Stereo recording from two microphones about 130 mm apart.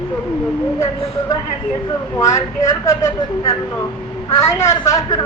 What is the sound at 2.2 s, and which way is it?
Speech, 25° left (ahead or behind).